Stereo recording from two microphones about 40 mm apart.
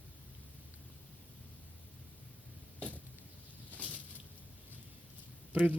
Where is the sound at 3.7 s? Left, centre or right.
Left.